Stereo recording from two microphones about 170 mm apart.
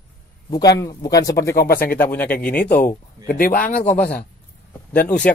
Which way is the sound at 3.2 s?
55° left (ahead or behind).